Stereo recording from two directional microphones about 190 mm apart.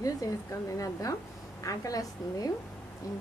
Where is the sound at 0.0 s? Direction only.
15° left (ahead or behind).